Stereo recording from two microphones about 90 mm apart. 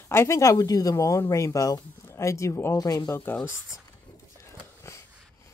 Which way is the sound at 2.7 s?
45° left (ahead or behind).